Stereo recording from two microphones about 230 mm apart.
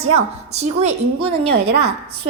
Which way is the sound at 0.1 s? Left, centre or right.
Right.